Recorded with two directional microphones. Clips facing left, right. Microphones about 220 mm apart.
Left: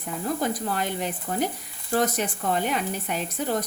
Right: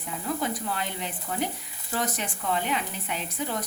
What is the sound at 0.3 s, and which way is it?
Speech, 45° left (ahead or behind).